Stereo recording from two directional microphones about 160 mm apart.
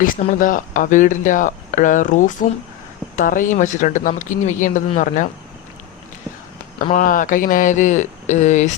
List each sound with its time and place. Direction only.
0.0 s speech: 55° left (ahead or behind)
6.9 s speech: 55° left (ahead or behind)